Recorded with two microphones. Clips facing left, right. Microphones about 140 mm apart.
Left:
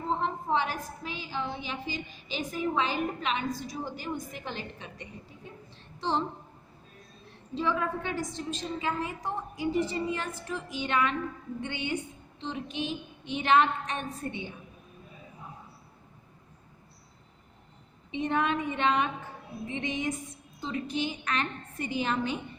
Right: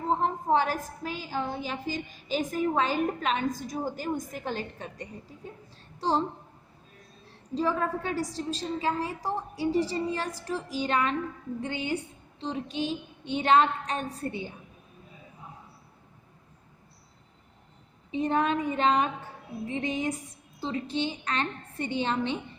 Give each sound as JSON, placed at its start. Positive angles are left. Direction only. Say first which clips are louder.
{"t": 0.1, "sound": "a sound", "louder": "right 4 dB", "side_deg": -40}
{"t": 1.0, "sound": "a woman's voice", "louder": "right 3 dB", "side_deg": -45}
{"t": 7.3, "sound": "a woman's voice", "louder": "right 2 dB", "side_deg": -40}
{"t": 18.1, "sound": "a woman's voice", "louder": "right 2 dB", "side_deg": -35}